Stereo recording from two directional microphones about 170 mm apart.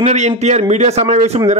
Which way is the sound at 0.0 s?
40° right (ahead or behind).